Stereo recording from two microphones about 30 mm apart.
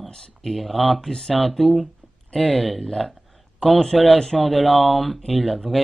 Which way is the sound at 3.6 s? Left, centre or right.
Centre.